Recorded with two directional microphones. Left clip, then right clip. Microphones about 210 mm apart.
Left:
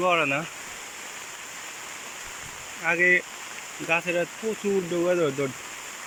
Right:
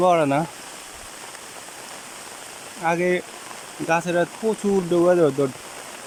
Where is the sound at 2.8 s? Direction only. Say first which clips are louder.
Left 1 dB; 15° right (ahead or behind).